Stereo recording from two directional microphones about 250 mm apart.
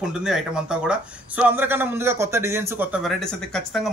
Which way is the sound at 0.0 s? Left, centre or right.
Centre.